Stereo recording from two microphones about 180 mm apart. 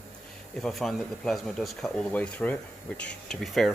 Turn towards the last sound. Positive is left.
turn(degrees=0)  # may be behind; listen again after turning